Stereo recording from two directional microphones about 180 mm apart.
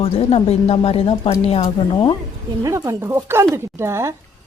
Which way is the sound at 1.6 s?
25° left (ahead or behind).